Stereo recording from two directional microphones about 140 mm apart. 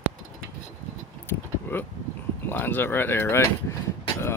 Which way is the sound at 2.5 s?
15° left (ahead or behind).